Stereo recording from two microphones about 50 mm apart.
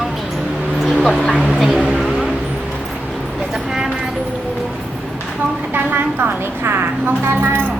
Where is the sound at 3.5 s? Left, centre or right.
Centre.